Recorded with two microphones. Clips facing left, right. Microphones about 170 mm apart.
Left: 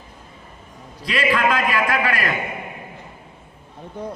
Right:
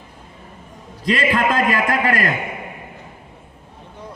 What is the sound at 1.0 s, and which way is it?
A man's voice, 40° right (ahead or behind).